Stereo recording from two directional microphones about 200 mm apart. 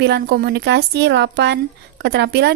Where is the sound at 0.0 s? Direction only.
55° right (ahead or behind).